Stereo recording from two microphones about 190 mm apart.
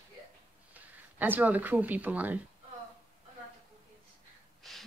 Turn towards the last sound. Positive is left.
turn(degrees=0)  # may be behind; listen again after turning